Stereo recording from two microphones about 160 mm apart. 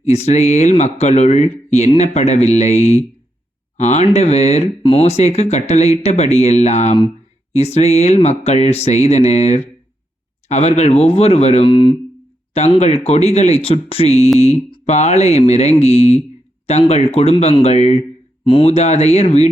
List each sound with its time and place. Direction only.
0.0 s speech: 45° left (ahead or behind)